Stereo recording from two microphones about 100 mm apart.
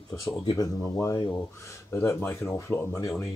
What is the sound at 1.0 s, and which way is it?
Speech, 35° left (ahead or behind).